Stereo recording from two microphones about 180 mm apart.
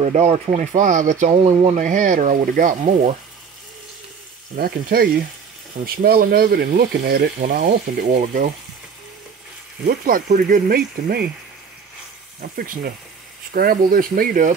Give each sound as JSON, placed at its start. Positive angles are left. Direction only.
{"t": 0.0, "sound": "speech", "side_deg": -40}
{"t": 1.3, "sound": "speech", "side_deg": -30}
{"t": 1.8, "sound": "speech", "side_deg": -45}
{"t": 2.8, "sound": "speech", "side_deg": -35}
{"t": 4.6, "sound": "speech", "side_deg": -60}
{"t": 9.8, "sound": "speech", "side_deg": -55}
{"t": 12.4, "sound": "speech", "side_deg": -55}